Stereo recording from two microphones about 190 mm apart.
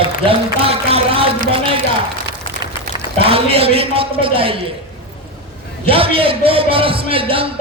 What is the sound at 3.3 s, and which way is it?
Speech, 30° right (ahead or behind).